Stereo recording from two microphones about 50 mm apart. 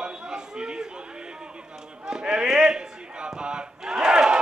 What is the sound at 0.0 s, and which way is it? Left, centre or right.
Chatter, centre.